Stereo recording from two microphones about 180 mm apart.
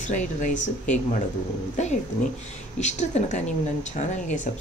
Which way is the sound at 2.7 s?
40° left (ahead or behind).